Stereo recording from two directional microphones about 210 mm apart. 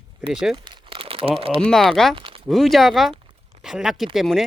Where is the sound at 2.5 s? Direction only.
Centre (ahead or behind).